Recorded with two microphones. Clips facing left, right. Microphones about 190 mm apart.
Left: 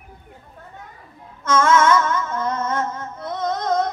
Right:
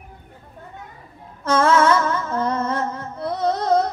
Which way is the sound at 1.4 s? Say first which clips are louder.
Even; 35° right (ahead or behind).